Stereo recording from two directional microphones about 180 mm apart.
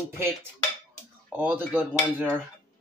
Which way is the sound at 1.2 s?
5° right (ahead or behind).